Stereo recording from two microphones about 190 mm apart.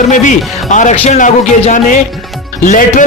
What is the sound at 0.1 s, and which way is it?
A man's voice, 40° left (ahead or behind).